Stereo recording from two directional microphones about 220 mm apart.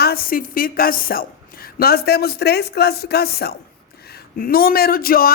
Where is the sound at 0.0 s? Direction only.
45° left (ahead or behind).